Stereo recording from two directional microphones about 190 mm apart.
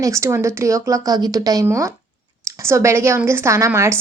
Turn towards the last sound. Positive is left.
turn(degrees=-15)  # may be behind; listen again after turning